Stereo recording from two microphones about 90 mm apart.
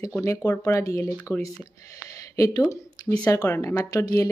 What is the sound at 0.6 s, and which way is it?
Speech, 40° left (ahead or behind).